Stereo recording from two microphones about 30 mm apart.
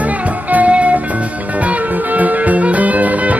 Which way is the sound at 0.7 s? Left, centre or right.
Right.